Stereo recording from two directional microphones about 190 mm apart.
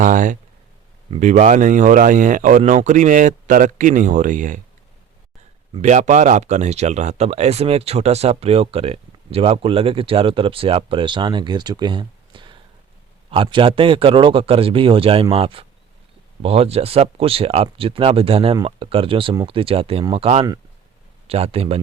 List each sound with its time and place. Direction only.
0.0 s speech: 45° right (ahead or behind)
5.7 s speech: 40° right (ahead or behind)